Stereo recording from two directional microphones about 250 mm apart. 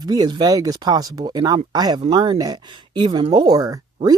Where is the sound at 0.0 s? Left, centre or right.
Centre.